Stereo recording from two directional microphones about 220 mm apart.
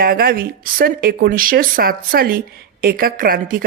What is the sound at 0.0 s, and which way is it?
A woman's voice, 40° right (ahead or behind).